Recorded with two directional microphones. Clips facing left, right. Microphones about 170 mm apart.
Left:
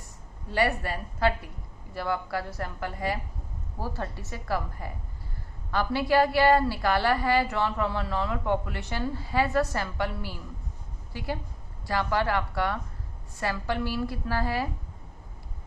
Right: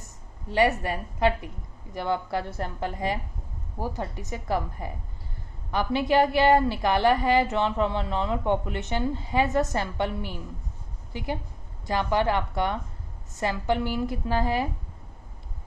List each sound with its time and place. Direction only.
0.5 s a woman's voice: 20° right (ahead or behind)